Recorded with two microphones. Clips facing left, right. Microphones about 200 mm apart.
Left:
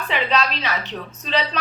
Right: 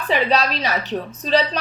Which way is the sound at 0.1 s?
40° right (ahead or behind).